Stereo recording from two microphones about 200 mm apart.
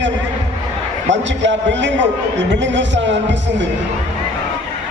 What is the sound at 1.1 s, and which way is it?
Speech, 65° right (ahead or behind).